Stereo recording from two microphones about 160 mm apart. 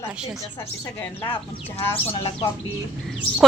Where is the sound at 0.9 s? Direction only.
15° left (ahead or behind).